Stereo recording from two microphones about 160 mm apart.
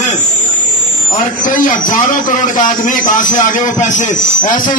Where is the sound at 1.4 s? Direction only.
55° left (ahead or behind).